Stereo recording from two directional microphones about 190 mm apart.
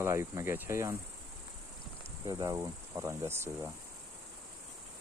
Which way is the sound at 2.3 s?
20° right (ahead or behind).